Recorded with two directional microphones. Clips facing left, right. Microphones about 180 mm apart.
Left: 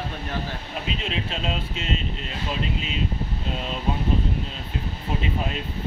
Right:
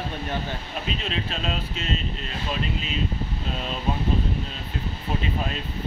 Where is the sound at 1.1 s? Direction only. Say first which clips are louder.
Left 1 dB; 20° left (ahead or behind).